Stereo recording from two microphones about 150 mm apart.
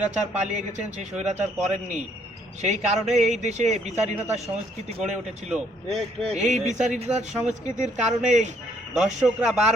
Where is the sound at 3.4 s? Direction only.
50° right (ahead or behind).